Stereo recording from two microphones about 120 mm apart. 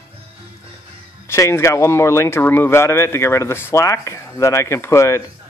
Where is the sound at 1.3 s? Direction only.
20° left (ahead or behind).